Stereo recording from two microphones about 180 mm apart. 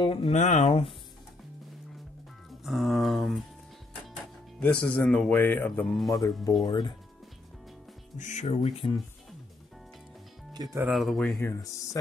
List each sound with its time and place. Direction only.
0.0 s speech: 30° left (ahead or behind)
2.6 s speech: centre (ahead or behind)
4.6 s speech: 5° left (ahead or behind)
6.6 s speech: 25° left (ahead or behind)
8.2 s speech: 40° left (ahead or behind)
10.5 s speech: 20° right (ahead or behind)
10.9 s speech: centre (ahead or behind)
11.4 s speech: 15° left (ahead or behind)